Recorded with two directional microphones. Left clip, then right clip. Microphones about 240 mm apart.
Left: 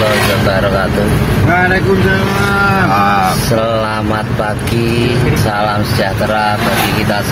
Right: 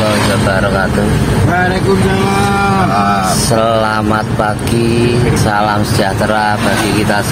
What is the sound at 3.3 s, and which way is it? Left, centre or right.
Speech, centre.